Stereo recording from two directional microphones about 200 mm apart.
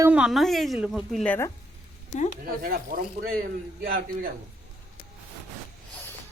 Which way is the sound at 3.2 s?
50° right (ahead or behind).